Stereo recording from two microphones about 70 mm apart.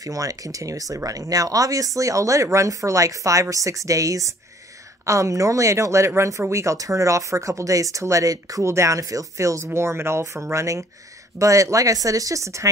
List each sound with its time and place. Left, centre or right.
0.0 s speech: right
8.6 s speech: right
9.8 s speech: right